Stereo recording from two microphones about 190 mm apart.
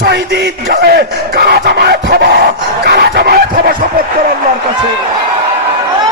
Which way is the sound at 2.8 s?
60° right (ahead or behind).